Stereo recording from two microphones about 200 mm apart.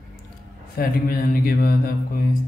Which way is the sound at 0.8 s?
45° left (ahead or behind).